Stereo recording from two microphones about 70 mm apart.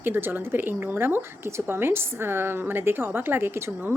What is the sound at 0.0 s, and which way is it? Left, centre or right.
A woman's voice, right.